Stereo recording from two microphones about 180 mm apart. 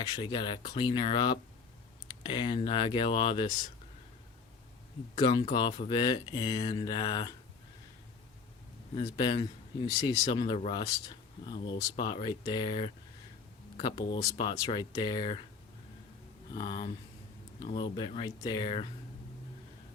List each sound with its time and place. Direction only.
0.1 s speech: 25° left (ahead or behind)
5.1 s speech: 25° left (ahead or behind)
9.0 s speech: 25° left (ahead or behind)
16.6 s speech: 25° left (ahead or behind)